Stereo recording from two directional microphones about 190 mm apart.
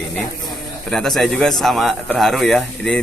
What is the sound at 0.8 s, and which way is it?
A man's voice, centre (ahead or behind).